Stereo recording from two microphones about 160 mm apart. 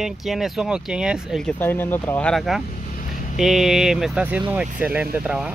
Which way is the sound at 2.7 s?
55° left (ahead or behind).